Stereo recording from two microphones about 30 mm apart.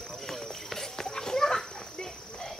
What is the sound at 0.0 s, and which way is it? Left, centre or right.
Children playing, centre.